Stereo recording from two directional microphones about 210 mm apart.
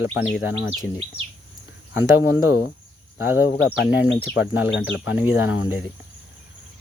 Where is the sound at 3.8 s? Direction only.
60° left (ahead or behind).